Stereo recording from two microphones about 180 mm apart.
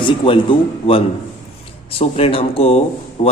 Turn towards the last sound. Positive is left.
turn(degrees=40)  # may be behind; listen again after turning